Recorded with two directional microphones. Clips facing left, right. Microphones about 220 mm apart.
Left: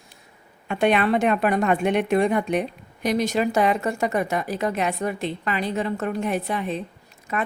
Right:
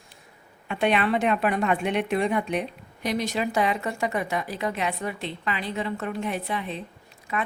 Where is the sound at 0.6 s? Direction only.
45° left (ahead or behind).